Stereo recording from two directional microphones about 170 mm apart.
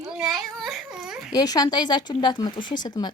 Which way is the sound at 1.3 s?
20° left (ahead or behind).